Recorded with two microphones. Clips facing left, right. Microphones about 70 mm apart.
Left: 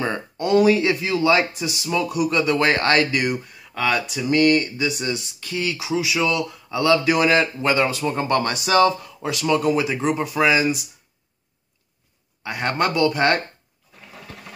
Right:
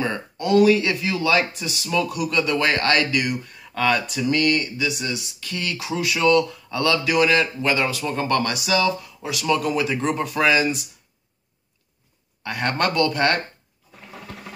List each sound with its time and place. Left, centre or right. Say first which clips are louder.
0.0 s speech: left 1 dB; left
3.7 s speech: right 1 dB; centre
4.3 s speech: left 4 dB; left
5.5 s speech: left 3 dB; centre
6.8 s speech: left 2 dB; left
12.4 s speech: left 1 dB; centre